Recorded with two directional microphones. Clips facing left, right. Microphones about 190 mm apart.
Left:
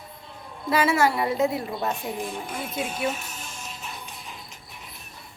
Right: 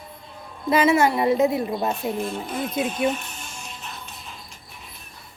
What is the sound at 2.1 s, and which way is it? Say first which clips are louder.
Music: right 4 dB; 15° left (ahead or behind).